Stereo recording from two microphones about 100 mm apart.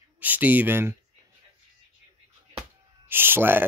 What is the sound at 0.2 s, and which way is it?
Speech, 15° right (ahead or behind).